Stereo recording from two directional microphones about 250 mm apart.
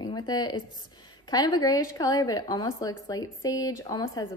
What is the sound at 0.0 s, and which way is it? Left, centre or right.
A woman's voice, centre.